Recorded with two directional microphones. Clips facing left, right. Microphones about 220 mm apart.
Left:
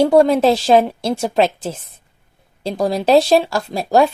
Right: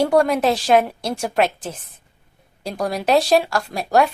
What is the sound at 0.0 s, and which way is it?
Speech, 25° left (ahead or behind).